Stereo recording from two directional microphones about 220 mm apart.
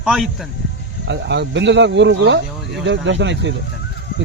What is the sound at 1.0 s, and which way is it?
A man's voice, 55° right (ahead or behind).